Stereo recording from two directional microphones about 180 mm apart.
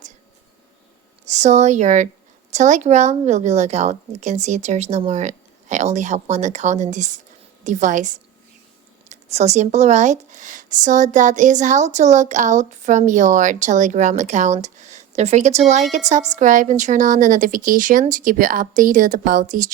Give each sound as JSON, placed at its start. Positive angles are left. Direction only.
{"t": 1.2, "sound": "a woman's voice", "side_deg": -40}